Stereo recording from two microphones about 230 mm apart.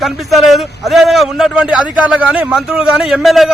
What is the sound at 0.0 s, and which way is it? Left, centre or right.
A man's voice, centre.